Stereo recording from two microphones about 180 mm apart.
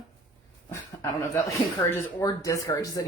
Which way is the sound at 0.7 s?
15° left (ahead or behind).